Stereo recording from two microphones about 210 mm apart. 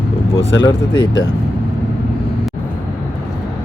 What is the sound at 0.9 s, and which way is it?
Speech, 55° left (ahead or behind).